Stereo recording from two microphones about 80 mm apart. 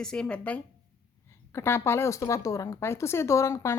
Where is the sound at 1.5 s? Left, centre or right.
Left.